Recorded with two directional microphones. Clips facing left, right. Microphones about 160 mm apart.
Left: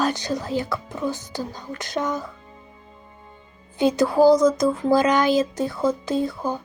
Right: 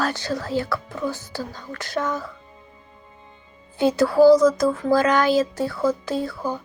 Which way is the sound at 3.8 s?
20° left (ahead or behind).